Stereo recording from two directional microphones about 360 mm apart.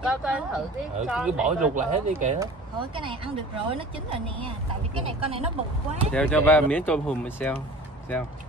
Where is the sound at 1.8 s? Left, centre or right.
Right.